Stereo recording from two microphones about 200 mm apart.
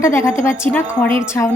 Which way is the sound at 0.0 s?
15° left (ahead or behind).